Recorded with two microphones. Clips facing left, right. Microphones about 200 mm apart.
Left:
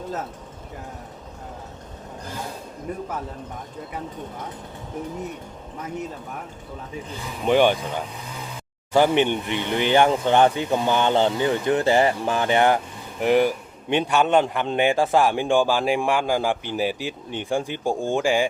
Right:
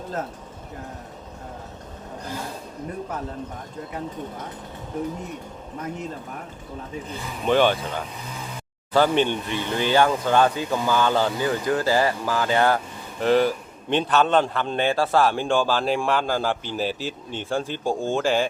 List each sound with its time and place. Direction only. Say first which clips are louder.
7.4 s a man's voice: left 1 dB; 15° left (ahead or behind)